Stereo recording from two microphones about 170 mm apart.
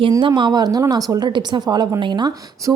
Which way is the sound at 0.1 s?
25° right (ahead or behind).